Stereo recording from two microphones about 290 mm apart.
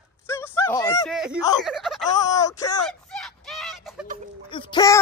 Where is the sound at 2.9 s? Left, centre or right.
Centre.